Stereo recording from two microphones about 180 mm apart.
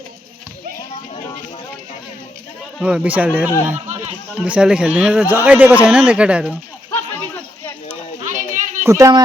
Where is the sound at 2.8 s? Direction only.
5° right (ahead or behind).